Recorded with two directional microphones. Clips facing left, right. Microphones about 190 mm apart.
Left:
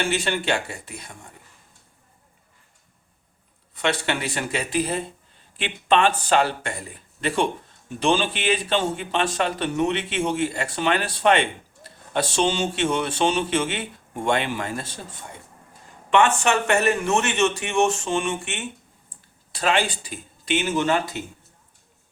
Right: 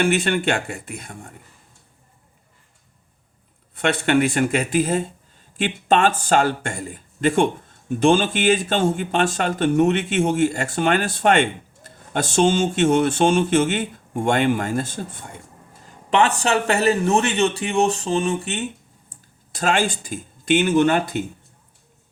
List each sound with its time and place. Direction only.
0.0 s speech: 55° right (ahead or behind)
3.8 s speech: 50° right (ahead or behind)
16.0 s a man's voice: 35° right (ahead or behind); by 21.2 s 55° right (ahead or behind)